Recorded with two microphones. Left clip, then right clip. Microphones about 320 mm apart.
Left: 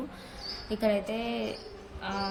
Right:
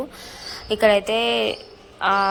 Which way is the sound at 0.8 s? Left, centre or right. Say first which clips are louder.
Right 12 dB; right.